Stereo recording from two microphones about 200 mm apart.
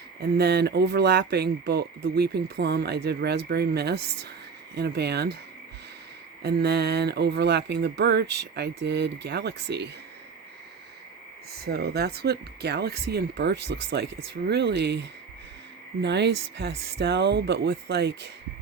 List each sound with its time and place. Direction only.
0.2 s speech: 55° right (ahead or behind)
6.4 s speech: 55° right (ahead or behind)
11.6 s speech: 50° right (ahead or behind)